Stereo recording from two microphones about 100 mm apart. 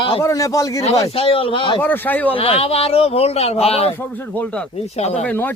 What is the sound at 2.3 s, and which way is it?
A man's voice, 70° left (ahead or behind).